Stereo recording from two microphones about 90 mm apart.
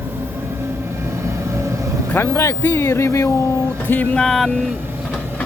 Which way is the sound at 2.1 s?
25° left (ahead or behind).